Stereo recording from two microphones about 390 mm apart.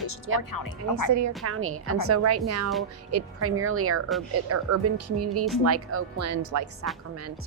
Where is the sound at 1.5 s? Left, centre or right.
Right.